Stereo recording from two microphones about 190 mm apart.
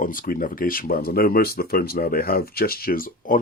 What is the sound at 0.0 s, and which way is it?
Speech, 45° left (ahead or behind).